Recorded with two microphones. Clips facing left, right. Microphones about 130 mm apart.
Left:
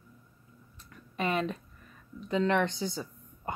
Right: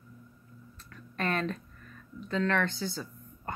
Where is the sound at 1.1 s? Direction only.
10° left (ahead or behind).